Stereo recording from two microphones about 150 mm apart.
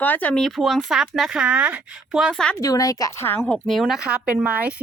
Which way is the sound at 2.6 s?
20° left (ahead or behind).